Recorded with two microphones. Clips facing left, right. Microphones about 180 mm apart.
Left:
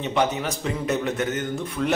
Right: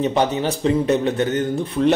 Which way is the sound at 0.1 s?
35° right (ahead or behind).